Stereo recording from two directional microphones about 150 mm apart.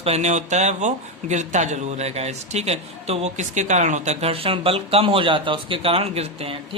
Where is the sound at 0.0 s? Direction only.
45° right (ahead or behind).